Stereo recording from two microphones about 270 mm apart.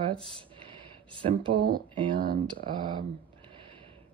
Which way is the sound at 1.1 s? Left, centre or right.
Centre.